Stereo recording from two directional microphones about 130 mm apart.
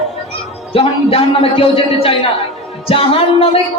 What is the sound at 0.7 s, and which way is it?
Music, 45° left (ahead or behind).